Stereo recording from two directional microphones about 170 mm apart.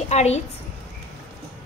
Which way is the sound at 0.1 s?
40° left (ahead or behind).